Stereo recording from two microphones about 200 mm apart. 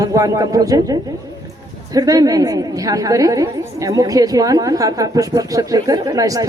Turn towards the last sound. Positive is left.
turn(degrees=-15)  # may be behind; listen again after turning